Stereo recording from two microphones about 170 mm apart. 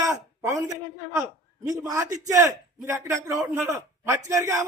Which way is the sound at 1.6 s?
20° right (ahead or behind).